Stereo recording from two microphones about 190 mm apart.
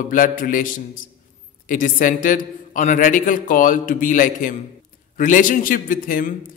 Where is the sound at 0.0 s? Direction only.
45° left (ahead or behind).